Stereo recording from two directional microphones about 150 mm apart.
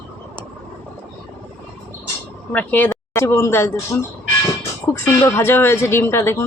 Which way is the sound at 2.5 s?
10° left (ahead or behind).